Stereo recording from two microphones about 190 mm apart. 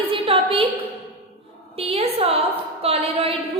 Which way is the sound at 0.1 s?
30° right (ahead or behind).